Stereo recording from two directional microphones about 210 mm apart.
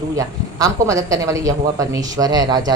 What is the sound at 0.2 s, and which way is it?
A woman's voice, 15° right (ahead or behind).